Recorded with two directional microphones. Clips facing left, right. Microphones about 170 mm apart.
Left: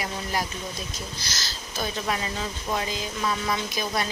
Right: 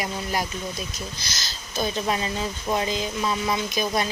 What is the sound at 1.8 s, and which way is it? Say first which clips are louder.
Speech: right 4 dB; 25° right (ahead or behind).